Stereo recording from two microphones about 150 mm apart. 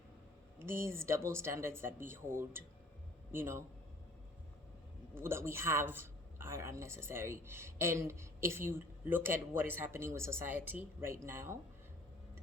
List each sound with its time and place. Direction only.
0.6 s speech: 15° right (ahead or behind)
5.1 s speech: 15° right (ahead or behind)